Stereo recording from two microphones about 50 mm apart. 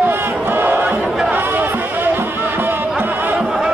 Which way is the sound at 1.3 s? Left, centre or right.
Right.